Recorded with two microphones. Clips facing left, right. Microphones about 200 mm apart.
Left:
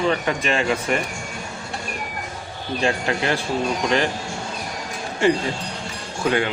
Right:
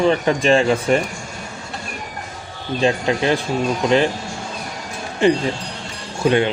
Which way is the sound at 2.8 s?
20° right (ahead or behind).